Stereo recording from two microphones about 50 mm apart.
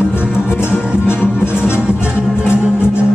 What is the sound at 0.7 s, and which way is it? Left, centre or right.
Music, left.